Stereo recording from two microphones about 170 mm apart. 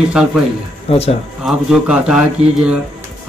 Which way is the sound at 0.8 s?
35° left (ahead or behind).